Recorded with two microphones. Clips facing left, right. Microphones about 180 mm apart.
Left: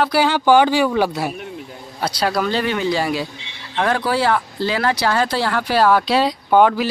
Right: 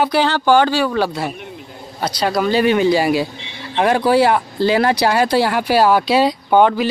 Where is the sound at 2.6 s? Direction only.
15° right (ahead or behind).